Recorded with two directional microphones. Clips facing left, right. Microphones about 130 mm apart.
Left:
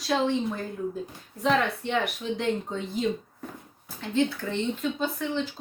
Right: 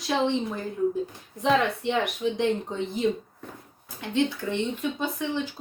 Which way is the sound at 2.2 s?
15° right (ahead or behind).